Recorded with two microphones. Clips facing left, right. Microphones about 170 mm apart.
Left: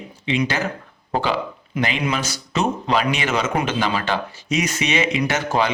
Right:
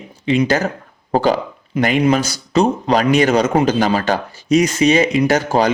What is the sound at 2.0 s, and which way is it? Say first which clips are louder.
A man's voice: right 9 dB; 40° right (ahead or behind).